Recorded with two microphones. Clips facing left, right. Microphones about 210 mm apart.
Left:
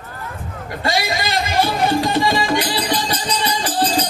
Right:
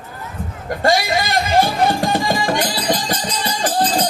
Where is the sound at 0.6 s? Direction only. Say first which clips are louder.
Right 4 dB; 50° right (ahead or behind).